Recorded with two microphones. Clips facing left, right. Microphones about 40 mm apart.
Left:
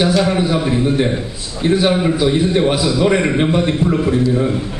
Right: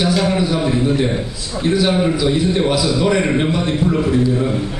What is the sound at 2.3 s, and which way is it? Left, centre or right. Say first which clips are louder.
A man's voice: left 2 dB; centre.